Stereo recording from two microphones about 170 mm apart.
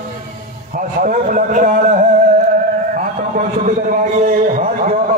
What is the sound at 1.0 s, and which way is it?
A man's voice, 50° right (ahead or behind).